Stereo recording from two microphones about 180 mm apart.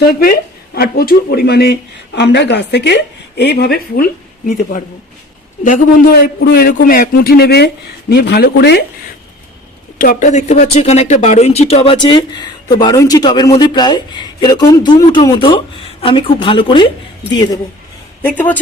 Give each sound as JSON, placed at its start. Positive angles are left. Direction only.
{"t": 0.1, "sound": "speech", "side_deg": 55}
{"t": 6.2, "sound": "speech", "side_deg": 60}
{"t": 10.0, "sound": "speech", "side_deg": 45}
{"t": 18.2, "sound": "speech", "side_deg": 10}